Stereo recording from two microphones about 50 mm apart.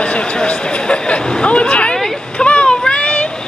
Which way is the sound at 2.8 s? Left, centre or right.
Centre.